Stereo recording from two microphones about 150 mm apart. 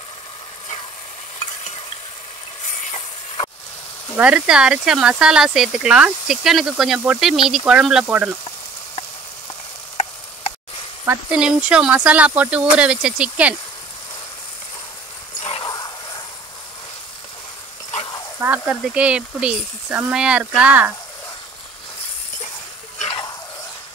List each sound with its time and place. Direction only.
4.2 s speech: 5° right (ahead or behind)
11.1 s speech: 5° right (ahead or behind)
15.6 s a sound: 25° left (ahead or behind)
18.4 s speech: 10° right (ahead or behind)
23.0 s stir: 35° left (ahead or behind)